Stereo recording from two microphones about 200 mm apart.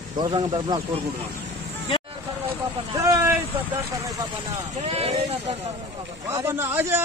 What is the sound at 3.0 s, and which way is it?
Vehicle, 15° right (ahead or behind).